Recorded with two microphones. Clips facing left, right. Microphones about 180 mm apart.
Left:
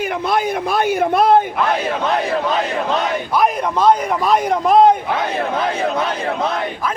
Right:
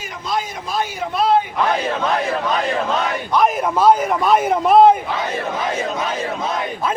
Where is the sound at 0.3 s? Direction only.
60° left (ahead or behind).